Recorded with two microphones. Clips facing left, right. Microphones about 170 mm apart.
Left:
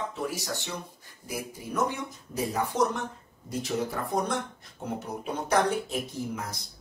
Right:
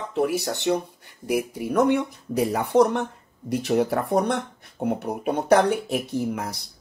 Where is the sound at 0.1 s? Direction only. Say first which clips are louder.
Right 9 dB; 65° right (ahead or behind).